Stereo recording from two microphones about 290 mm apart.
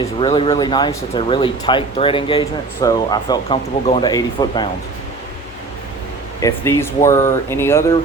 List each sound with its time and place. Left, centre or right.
0.2 s speech: centre
6.4 s speech: centre